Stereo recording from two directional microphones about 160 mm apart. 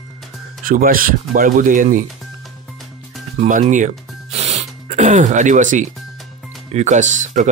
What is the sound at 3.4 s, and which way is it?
Speech, 50° right (ahead or behind).